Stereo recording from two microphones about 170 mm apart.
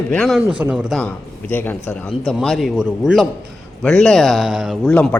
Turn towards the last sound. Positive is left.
turn(degrees=10)  # may be behind; listen again after turning